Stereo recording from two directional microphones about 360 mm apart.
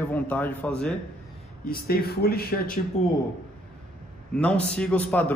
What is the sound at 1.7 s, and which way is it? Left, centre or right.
Speech, left.